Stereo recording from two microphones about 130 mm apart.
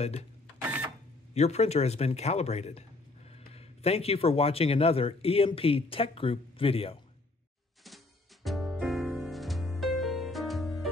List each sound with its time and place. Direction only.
0.6 s cash register: 10° right (ahead or behind)
1.3 s speech: 55° left (ahead or behind)
8.5 s music: centre (ahead or behind)